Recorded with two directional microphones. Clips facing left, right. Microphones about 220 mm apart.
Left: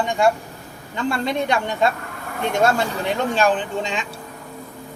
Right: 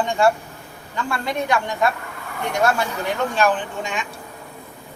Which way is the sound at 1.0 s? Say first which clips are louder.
Left 3 dB; 25° left (ahead or behind).